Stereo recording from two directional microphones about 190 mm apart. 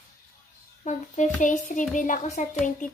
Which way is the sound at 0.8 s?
40° left (ahead or behind).